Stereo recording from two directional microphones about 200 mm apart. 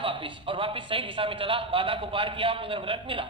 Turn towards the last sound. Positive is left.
turn(degrees=-25)  # may be behind; listen again after turning